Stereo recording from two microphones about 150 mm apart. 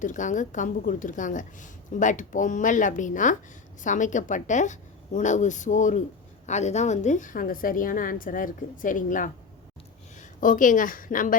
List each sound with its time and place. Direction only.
0.0 s a woman's voice: 55° left (ahead or behind)